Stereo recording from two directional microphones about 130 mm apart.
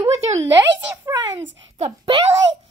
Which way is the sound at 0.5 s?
30° right (ahead or behind).